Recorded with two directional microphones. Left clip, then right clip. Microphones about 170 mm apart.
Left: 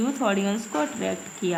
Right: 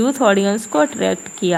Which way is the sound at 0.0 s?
45° right (ahead or behind).